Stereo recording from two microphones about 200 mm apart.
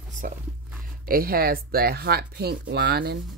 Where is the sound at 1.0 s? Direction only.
45° right (ahead or behind).